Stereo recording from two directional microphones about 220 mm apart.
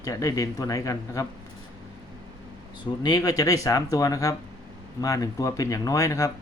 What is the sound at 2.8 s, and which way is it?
Speech, 20° left (ahead or behind).